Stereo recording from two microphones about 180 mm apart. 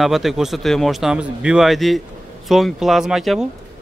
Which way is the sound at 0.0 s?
Centre (ahead or behind).